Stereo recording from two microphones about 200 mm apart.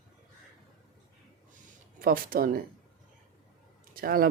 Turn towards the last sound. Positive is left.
turn(degrees=-45)  # may be behind; listen again after turning